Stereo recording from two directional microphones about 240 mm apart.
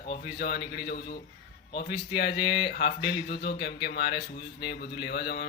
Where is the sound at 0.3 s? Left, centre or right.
Left.